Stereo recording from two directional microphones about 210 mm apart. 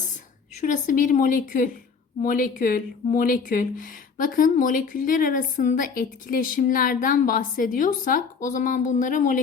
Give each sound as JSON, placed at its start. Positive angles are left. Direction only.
{"t": 0.6, "sound": "speech", "side_deg": 40}